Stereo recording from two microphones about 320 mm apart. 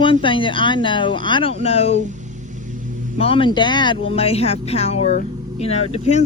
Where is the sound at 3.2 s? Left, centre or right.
Centre.